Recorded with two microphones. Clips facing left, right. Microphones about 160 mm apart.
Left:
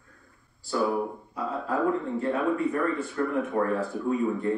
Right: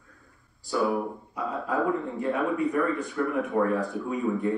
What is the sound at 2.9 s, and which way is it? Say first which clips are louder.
Speech: even; 5° right (ahead or behind).